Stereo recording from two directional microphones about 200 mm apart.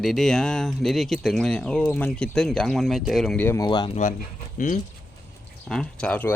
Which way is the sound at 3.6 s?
25° left (ahead or behind).